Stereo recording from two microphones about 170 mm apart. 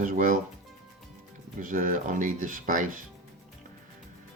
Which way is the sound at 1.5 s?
50° right (ahead or behind).